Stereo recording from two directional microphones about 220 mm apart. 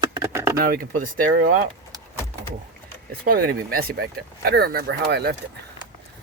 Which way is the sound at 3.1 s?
45° right (ahead or behind).